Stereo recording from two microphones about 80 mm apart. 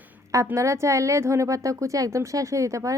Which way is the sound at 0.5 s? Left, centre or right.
Right.